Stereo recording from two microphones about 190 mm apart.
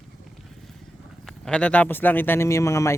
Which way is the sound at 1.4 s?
5° left (ahead or behind).